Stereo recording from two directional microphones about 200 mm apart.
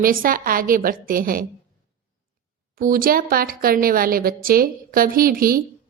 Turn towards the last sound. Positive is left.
turn(degrees=-45)  # may be behind; listen again after turning